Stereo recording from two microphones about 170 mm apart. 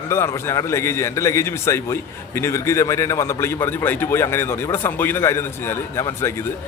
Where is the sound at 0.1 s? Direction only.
15° left (ahead or behind).